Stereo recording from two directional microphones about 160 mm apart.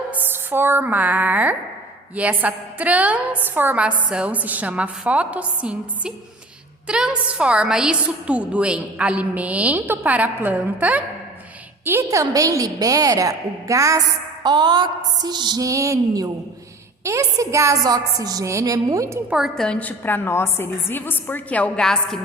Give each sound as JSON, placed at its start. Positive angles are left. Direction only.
{"t": 0.1, "sound": "a woman's voice", "side_deg": -10}
{"t": 19.3, "sound": "a woman's voice", "side_deg": 0}